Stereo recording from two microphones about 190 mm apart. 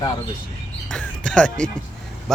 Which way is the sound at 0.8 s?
5° left (ahead or behind).